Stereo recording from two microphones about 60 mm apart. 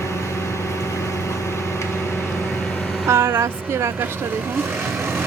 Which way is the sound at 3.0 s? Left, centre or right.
Right.